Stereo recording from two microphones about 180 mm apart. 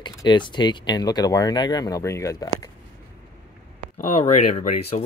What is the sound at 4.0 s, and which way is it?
Speech, 40° left (ahead or behind).